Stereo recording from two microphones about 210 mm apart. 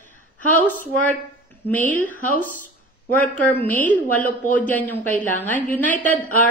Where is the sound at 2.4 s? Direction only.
40° left (ahead or behind).